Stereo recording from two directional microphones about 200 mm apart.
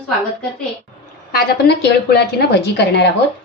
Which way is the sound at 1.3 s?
50° left (ahead or behind).